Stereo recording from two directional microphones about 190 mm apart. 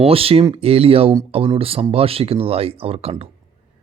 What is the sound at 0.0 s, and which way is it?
Speech, 30° right (ahead or behind).